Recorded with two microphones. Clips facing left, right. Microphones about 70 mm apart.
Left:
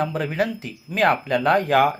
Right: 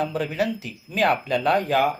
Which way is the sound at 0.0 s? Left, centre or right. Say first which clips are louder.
Left 1 dB; left.